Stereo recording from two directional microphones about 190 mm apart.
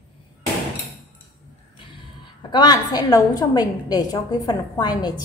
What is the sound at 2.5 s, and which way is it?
A woman's voice, 20° left (ahead or behind).